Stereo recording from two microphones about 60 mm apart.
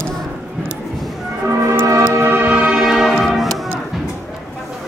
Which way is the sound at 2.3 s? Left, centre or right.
Right.